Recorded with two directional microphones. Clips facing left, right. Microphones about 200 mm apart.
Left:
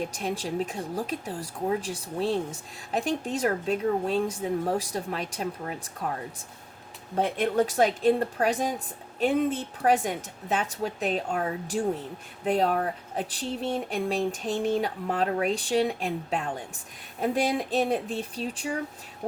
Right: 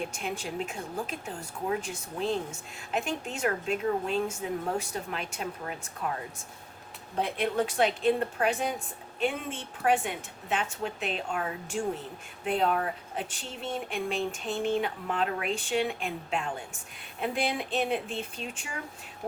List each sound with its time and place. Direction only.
0.0 s speech: 40° left (ahead or behind)
7.2 s speech: 45° left (ahead or behind)